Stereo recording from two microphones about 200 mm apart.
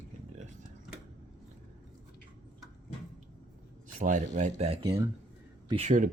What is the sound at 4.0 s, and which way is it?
Speech, 40° right (ahead or behind).